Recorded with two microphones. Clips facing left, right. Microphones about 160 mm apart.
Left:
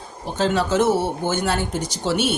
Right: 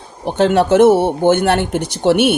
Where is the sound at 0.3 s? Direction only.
65° right (ahead or behind).